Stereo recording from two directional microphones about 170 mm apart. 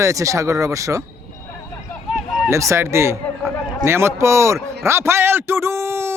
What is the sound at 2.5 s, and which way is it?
Speech, 15° right (ahead or behind).